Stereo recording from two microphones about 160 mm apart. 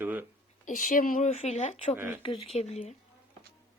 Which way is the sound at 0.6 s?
55° left (ahead or behind).